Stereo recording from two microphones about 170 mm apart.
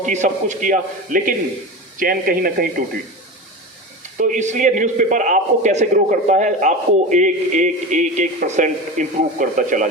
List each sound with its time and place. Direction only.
0.0 s a man's voice: 45° right (ahead or behind)
4.2 s a man's voice: 45° right (ahead or behind)